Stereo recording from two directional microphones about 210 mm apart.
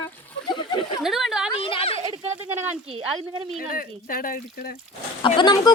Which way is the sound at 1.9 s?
30° right (ahead or behind).